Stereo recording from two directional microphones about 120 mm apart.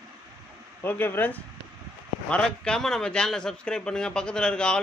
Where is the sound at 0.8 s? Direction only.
15° left (ahead or behind).